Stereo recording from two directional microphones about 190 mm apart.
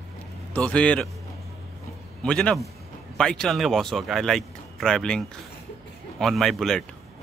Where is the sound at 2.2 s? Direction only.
5° left (ahead or behind).